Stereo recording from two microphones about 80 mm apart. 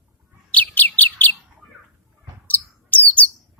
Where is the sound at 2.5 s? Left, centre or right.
Centre.